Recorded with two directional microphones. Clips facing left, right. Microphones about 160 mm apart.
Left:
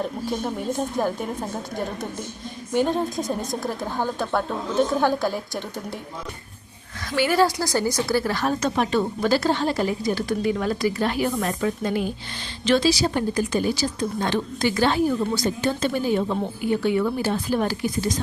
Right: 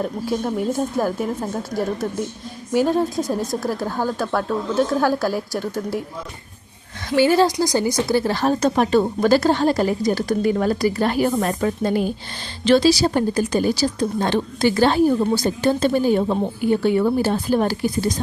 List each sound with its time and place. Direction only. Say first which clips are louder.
0.0 s a woman's voice: right 3 dB; 5° right (ahead or behind)
7.2 s a woman's voice: right 4 dB; 25° right (ahead or behind)
7.6 s a woman's voice: right 4 dB; 15° right (ahead or behind); by 18.1 s 35° right (ahead or behind)